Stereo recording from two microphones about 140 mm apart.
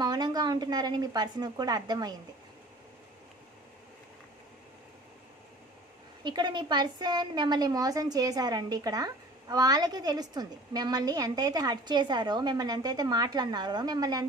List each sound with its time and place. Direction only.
0.0 s a woman's voice: 30° right (ahead or behind)
6.2 s a woman's voice: 35° right (ahead or behind)